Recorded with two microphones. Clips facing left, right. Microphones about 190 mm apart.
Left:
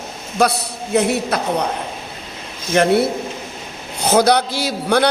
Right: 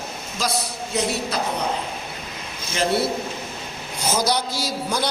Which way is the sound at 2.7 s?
60° left (ahead or behind).